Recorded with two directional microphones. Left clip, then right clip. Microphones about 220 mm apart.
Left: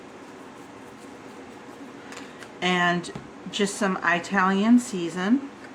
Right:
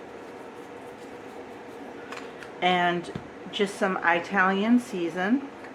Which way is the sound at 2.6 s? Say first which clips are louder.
Even; 55° left (ahead or behind).